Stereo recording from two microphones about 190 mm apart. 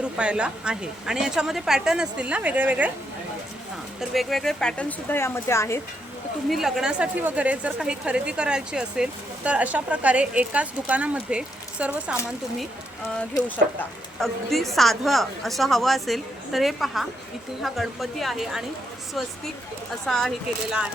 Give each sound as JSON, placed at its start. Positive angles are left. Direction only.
{"t": 0.2, "sound": "a woman's voice", "side_deg": -5}
{"t": 4.1, "sound": "speech", "side_deg": 0}
{"t": 6.5, "sound": "a woman's voice", "side_deg": 0}
{"t": 13.4, "sound": "speech", "side_deg": 20}
{"t": 14.2, "sound": "a woman's voice", "side_deg": 0}
{"t": 20.1, "sound": "a woman's voice", "side_deg": 0}